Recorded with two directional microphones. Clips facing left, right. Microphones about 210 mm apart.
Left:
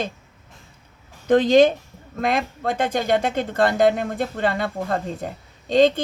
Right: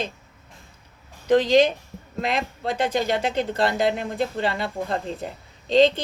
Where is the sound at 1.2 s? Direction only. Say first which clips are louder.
Left 3 dB; 50° left (ahead or behind).